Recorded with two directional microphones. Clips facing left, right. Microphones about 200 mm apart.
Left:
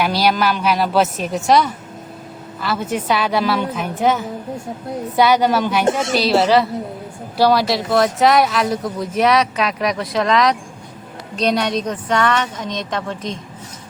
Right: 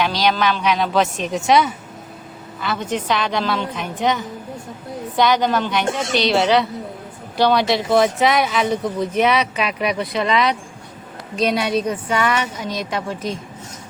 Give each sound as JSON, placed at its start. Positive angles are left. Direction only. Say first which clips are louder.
{"t": 0.0, "sound": "a woman's voice", "louder": "left 2 dB", "side_deg": 10}